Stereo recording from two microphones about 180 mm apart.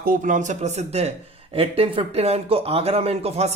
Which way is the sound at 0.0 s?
50° right (ahead or behind).